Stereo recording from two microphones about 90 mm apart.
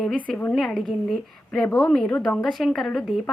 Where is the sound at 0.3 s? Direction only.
15° left (ahead or behind).